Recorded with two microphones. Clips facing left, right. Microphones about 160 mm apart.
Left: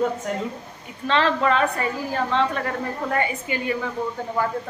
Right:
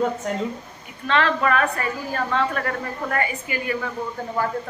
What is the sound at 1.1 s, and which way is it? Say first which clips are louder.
A woman's voice: even; 25° left (ahead or behind).